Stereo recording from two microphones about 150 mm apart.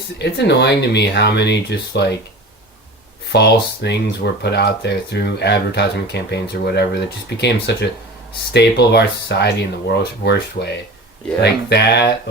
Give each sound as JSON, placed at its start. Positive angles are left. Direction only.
{"t": 0.2, "sound": "speech", "side_deg": 90}
{"t": 3.3, "sound": "speech", "side_deg": 90}